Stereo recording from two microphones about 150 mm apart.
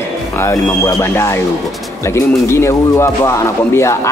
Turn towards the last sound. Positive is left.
turn(degrees=20)  # may be behind; listen again after turning